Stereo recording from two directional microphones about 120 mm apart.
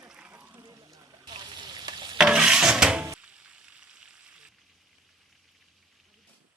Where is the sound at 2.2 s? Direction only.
5° right (ahead or behind).